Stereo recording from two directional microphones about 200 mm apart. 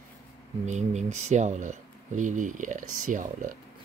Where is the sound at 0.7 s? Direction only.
35° right (ahead or behind).